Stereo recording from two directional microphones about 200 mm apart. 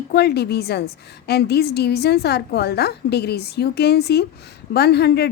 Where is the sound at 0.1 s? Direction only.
55° left (ahead or behind).